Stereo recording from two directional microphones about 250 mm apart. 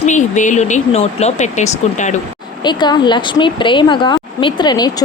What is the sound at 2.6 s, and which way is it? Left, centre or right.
Speech, centre.